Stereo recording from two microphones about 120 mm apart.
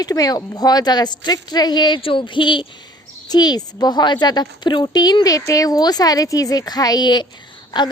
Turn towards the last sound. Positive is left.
turn(degrees=40)  # may be behind; listen again after turning